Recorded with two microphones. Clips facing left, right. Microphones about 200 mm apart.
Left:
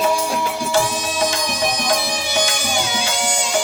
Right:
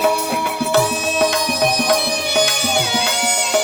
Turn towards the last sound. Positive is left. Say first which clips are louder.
# right 2 dB
turn(degrees=-65)  # may be behind; listen again after turning